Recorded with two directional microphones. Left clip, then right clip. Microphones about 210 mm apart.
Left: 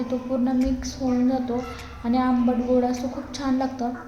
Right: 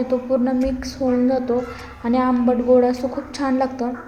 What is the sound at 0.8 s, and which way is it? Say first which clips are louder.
A woman's voice: right 5 dB; 15° right (ahead or behind).